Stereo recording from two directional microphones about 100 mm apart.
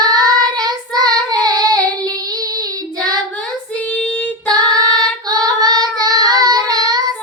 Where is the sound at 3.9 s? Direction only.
10° left (ahead or behind).